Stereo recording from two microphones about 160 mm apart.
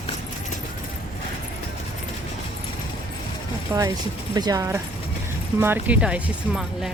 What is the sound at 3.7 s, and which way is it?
Speech, 15° right (ahead or behind).